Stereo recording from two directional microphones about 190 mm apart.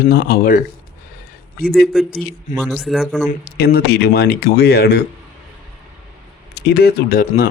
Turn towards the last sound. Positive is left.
turn(degrees=50)  # may be behind; listen again after turning